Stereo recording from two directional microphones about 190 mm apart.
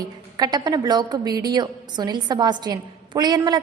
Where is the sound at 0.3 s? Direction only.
20° right (ahead or behind).